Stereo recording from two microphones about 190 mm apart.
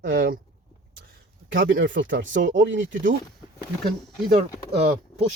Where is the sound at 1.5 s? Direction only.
80° right.